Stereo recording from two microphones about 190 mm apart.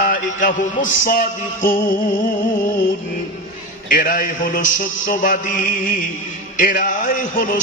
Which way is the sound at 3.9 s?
45° left (ahead or behind).